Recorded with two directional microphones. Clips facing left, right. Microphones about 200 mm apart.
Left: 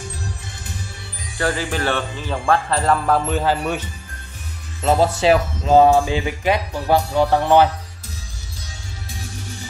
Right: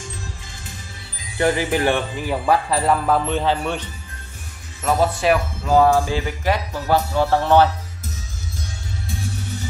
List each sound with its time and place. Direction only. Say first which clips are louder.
1.4 s speech: right 3 dB; 15° right (ahead or behind); by 3.8 s 5° left (ahead or behind)
4.8 s speech: left 2 dB; 25° left (ahead or behind)